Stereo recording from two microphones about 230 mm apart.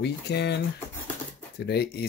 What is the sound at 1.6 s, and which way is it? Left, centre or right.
Speech, left.